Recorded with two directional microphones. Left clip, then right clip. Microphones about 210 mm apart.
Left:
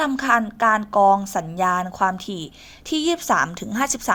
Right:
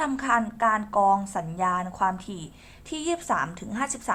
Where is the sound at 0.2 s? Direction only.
30° left (ahead or behind).